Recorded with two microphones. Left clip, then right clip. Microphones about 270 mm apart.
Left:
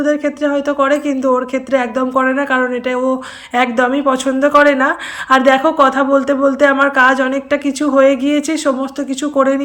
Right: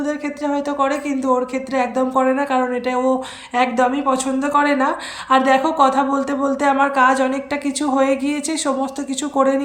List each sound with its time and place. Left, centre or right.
0.0 s speech: centre